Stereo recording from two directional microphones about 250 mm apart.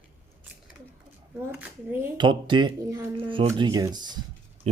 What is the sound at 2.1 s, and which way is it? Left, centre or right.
Speech, centre.